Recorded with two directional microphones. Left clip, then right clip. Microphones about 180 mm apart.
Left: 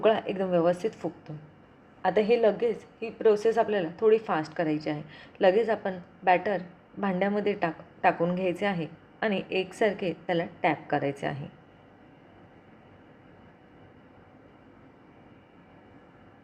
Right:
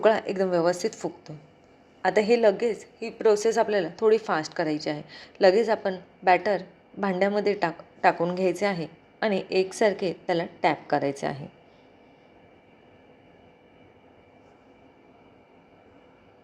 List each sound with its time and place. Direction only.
0.0 s a woman's voice: 30° right (ahead or behind)